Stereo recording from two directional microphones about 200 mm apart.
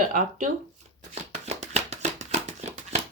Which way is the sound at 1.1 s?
35° right (ahead or behind).